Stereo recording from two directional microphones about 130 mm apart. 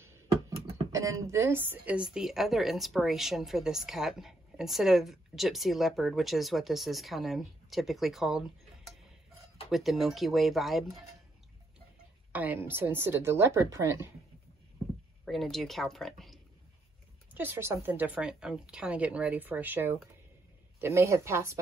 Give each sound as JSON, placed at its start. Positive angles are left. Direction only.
{"t": 0.9, "sound": "a woman's voice", "side_deg": -25}
{"t": 12.3, "sound": "speech", "side_deg": -10}
{"t": 15.2, "sound": "a woman's voice", "side_deg": 0}
{"t": 17.3, "sound": "speech", "side_deg": -15}